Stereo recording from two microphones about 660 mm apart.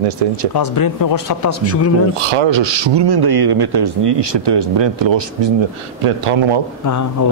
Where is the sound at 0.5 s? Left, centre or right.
Left.